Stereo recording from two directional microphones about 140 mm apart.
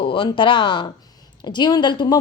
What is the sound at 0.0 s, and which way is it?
A woman's voice, 35° left (ahead or behind).